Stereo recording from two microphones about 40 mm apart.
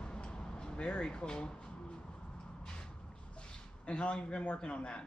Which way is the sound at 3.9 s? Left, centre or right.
Left.